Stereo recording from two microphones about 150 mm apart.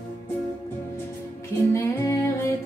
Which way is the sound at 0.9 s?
20° left (ahead or behind).